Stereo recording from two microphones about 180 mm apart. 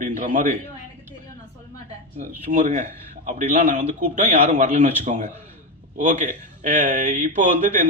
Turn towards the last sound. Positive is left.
turn(degrees=-40)  # may be behind; listen again after turning